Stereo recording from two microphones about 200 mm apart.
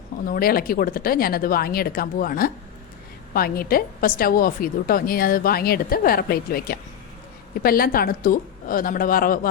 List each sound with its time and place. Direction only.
0.3 s a woman's voice: 45° left (ahead or behind)